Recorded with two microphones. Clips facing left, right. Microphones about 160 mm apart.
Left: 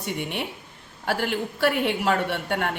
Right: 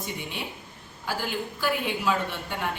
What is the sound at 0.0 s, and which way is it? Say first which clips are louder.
A woman's voice: left 5 dB; 65° left (ahead or behind).